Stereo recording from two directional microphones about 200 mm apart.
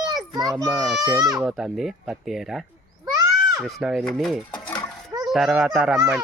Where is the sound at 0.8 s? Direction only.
5° right (ahead or behind).